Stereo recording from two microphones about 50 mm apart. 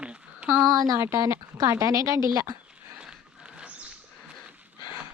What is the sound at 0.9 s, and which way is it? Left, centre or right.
A woman's voice, right.